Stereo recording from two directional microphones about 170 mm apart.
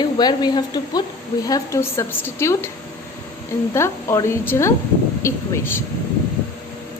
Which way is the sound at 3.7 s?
15° left (ahead or behind).